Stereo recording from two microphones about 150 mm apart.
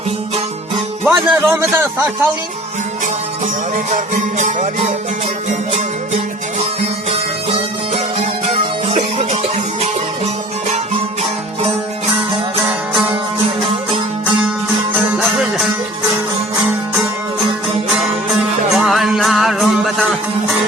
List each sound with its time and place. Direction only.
1.0 s speech: 10° right (ahead or behind)
3.9 s music: 55° right (ahead or behind)
8.9 s music: 40° right (ahead or behind)
15.2 s music: 5° right (ahead or behind)
17.9 s music: centre (ahead or behind)